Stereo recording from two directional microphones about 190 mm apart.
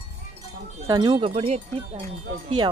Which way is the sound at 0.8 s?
25° right (ahead or behind).